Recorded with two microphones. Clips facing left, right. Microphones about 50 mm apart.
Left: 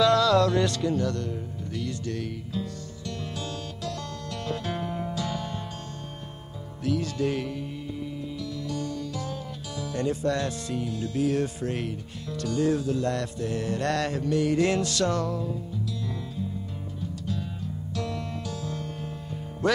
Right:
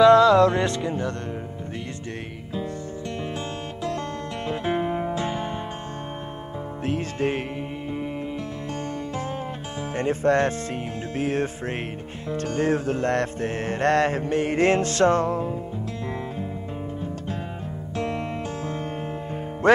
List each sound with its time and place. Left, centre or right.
0.0 s music: right
3.3 s music: right
6.8 s music: right
17.9 s music: right
19.6 s music: right